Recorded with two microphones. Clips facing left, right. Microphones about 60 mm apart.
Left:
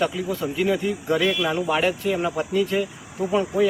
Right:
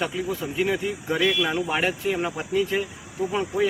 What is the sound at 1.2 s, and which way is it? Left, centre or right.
Speech, centre.